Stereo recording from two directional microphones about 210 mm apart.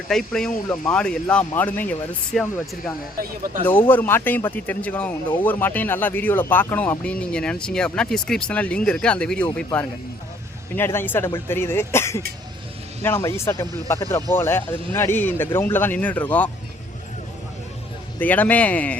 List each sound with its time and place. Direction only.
0.1 s speech: centre (ahead or behind)
10.8 s speech: 10° left (ahead or behind)
18.2 s speech: 10° left (ahead or behind)